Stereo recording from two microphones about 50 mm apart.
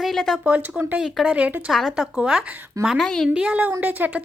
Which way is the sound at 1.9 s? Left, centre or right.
Centre.